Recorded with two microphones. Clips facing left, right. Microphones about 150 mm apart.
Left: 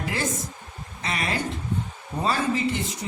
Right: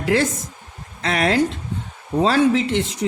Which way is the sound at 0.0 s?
85° right.